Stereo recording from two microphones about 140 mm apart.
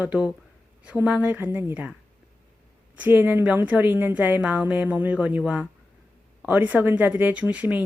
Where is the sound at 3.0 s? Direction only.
15° right (ahead or behind).